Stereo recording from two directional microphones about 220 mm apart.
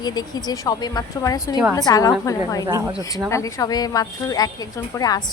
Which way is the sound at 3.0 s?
15° left (ahead or behind).